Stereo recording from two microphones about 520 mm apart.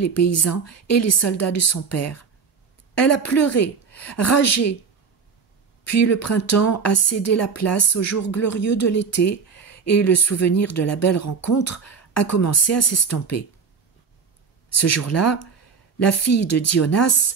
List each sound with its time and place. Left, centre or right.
0.0 s speech: left
5.9 s speech: left
14.8 s speech: left